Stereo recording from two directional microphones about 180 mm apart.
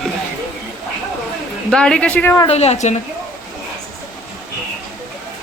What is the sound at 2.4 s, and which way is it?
Speech, 35° left (ahead or behind).